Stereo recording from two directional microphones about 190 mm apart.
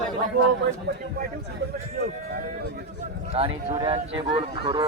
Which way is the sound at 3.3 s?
30° right (ahead or behind).